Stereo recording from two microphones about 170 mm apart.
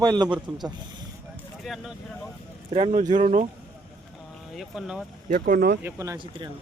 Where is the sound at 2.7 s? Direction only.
35° right (ahead or behind).